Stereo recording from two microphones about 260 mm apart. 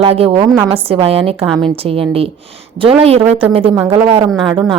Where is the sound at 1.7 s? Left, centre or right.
Right.